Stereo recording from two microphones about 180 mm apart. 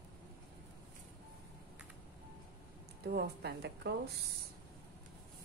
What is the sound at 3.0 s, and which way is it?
Speech, 65° right (ahead or behind).